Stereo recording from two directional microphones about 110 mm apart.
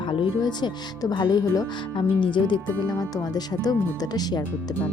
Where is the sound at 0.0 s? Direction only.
50° left (ahead or behind).